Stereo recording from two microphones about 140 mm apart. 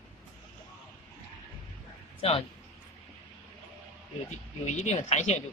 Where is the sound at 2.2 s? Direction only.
40° left (ahead or behind).